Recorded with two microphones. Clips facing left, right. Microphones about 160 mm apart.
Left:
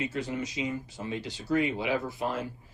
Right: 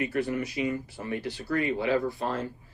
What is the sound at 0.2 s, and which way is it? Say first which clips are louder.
Speech: right 4 dB; 20° left (ahead or behind).